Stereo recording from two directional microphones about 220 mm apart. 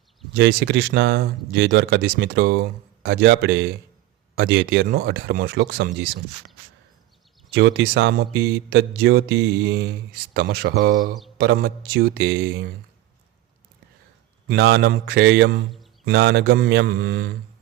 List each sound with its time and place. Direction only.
0.3 s speech: 50° right (ahead or behind)
7.5 s speech: 50° right (ahead or behind)
14.4 s speech: 45° right (ahead or behind)